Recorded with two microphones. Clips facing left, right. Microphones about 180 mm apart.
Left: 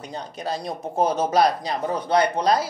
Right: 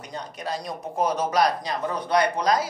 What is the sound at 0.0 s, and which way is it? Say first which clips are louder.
A man's voice: left 2 dB; 30° left (ahead or behind).